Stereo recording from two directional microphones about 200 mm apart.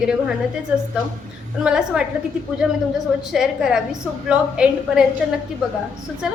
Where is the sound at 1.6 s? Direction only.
5° right (ahead or behind).